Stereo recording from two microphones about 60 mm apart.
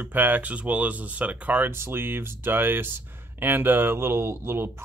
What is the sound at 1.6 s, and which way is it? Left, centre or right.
Speech, right.